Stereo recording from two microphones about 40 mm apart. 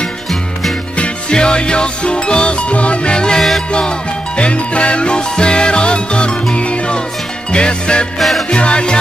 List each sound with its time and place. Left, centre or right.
1.3 s music: left
8.2 s music: centre
8.5 s music: left